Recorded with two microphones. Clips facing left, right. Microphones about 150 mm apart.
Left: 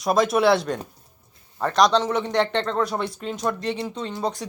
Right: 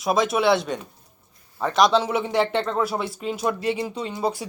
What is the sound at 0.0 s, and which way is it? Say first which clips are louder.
A man's voice: left 2 dB; centre (ahead or behind).